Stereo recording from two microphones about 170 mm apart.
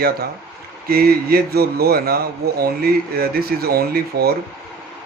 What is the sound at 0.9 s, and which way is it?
Speech, 65° right (ahead or behind).